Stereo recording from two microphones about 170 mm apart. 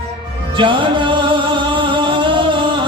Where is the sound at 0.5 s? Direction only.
30° right (ahead or behind).